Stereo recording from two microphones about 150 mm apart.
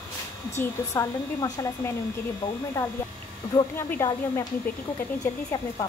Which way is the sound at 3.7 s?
20° left (ahead or behind).